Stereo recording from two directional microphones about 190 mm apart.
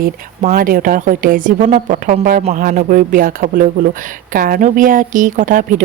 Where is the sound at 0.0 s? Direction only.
50° right (ahead or behind).